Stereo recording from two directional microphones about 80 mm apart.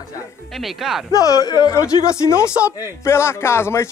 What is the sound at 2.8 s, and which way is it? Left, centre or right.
Speech, left.